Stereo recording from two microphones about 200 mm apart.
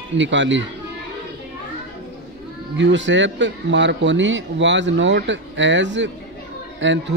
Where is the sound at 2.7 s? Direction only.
65° right (ahead or behind).